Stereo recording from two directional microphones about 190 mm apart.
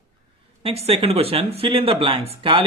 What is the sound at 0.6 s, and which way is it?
Speech, 30° right (ahead or behind).